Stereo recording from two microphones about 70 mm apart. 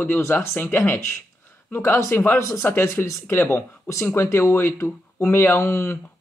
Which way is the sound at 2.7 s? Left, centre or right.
Left.